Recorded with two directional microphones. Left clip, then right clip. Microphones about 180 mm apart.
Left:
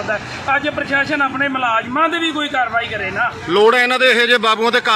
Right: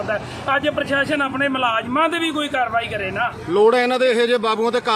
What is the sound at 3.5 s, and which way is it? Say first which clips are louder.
A man's voice: left 3 dB; centre (ahead or behind).